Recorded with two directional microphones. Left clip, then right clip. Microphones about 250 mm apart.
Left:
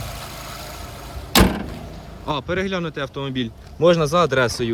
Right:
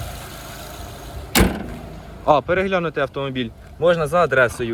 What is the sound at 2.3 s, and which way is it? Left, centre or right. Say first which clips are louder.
A man's voice: right 7 dB; centre.